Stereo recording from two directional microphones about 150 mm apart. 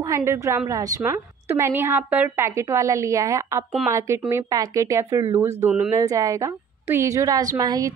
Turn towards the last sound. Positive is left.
turn(degrees=-25)  # may be behind; listen again after turning